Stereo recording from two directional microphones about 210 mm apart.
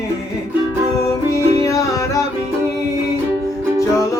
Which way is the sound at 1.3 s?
15° left (ahead or behind).